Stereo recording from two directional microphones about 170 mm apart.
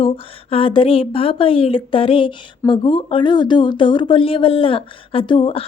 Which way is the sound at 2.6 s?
30° left (ahead or behind).